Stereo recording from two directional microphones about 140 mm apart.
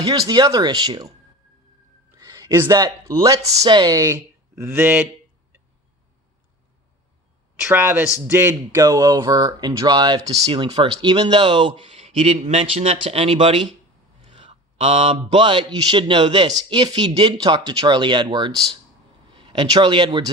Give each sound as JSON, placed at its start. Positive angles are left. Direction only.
{"t": 0.2, "sound": "speech", "side_deg": -25}
{"t": 2.1, "sound": "a sound", "side_deg": -25}
{"t": 2.6, "sound": "speech", "side_deg": -25}
{"t": 7.6, "sound": "speech", "side_deg": -15}
{"t": 14.8, "sound": "mantra", "side_deg": -50}
{"t": 15.4, "sound": "speech", "side_deg": -35}